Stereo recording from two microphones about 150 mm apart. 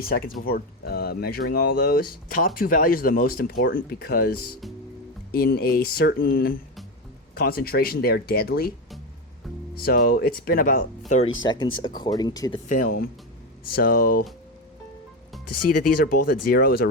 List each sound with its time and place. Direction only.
0.0 s speech: 80° left
0.4 s speech: 90° left; by 6.6 s 75° left (ahead or behind)
7.3 s speech: 90° left
9.7 s speech: 80° left
11.6 s speech: 30° left (ahead or behind)
12.6 s speech: 60° left (ahead or behind)
13.7 s speech: 85° left
15.7 s speech: 70° left (ahead or behind); by 16.9 s 90° left